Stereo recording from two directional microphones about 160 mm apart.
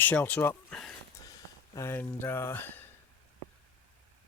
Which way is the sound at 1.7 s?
15° left (ahead or behind).